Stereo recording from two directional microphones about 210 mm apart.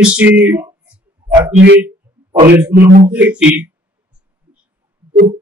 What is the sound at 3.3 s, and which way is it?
Speech, 5° right (ahead or behind).